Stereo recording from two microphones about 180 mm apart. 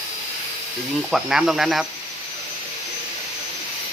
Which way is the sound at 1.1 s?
Centre (ahead or behind).